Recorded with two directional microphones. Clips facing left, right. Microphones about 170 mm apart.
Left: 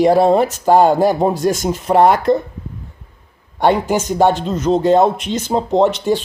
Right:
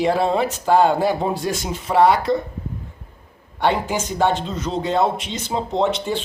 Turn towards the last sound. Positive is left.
turn(degrees=45)  # may be behind; listen again after turning